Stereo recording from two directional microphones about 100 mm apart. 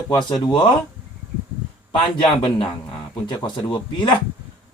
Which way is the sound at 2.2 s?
55° left (ahead or behind).